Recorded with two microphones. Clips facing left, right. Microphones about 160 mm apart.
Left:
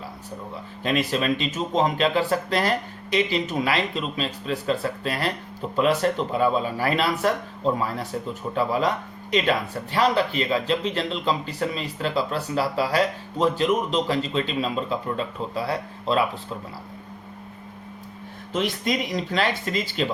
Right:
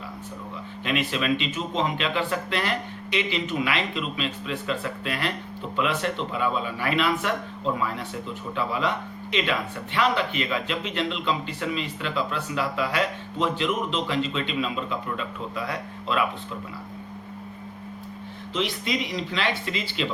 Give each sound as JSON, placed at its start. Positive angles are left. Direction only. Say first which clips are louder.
{"t": 0.9, "sound": "speech", "louder": "left 2 dB", "side_deg": 40}
{"t": 18.5, "sound": "speech", "louder": "left 3 dB", "side_deg": 45}